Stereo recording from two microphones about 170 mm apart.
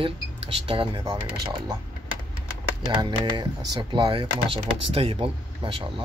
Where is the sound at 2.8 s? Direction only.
25° right (ahead or behind).